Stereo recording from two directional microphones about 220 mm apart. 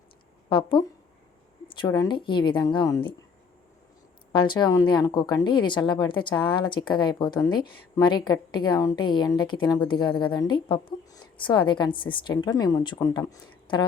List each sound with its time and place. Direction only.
0.5 s speech: 20° left (ahead or behind)
4.3 s speech: 20° left (ahead or behind)